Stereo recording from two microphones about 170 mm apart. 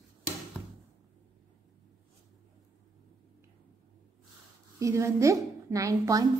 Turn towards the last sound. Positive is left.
turn(degrees=-20)  # may be behind; listen again after turning